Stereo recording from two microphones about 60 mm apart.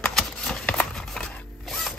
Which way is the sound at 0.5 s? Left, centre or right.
Left.